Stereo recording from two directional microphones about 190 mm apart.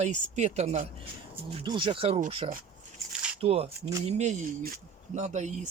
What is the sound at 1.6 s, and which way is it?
Speech, 25° right (ahead or behind).